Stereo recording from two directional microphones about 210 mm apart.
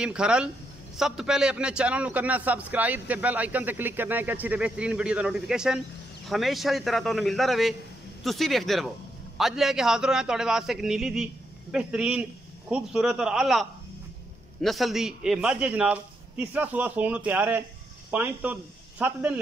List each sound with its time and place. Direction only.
0.0 s a man's voice: 5° right (ahead or behind)